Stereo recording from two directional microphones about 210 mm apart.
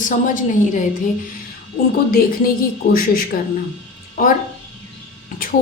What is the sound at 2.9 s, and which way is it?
Speech, 45° left (ahead or behind).